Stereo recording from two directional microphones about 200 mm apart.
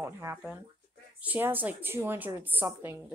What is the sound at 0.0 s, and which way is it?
A woman's voice, 15° right (ahead or behind).